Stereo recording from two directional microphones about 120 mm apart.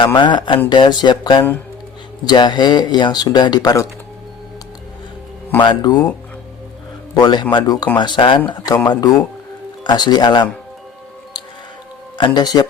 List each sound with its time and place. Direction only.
0.0 s speech: 40° left (ahead or behind)
5.6 s speech: 35° left (ahead or behind)
7.1 s a man's voice: 35° left (ahead or behind)
12.1 s speech: 40° left (ahead or behind)